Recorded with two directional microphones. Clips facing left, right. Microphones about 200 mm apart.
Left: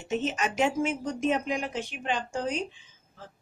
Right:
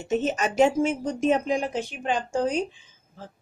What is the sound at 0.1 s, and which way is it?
Speech, 45° right (ahead or behind).